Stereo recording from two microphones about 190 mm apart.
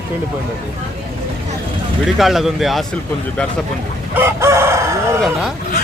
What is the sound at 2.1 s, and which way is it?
Speech, centre (ahead or behind).